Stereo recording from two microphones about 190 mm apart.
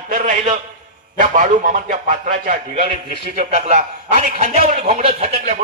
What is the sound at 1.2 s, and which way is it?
A man's voice, 40° right (ahead or behind).